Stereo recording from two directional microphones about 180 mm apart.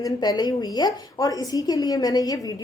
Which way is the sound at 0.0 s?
20° left (ahead or behind).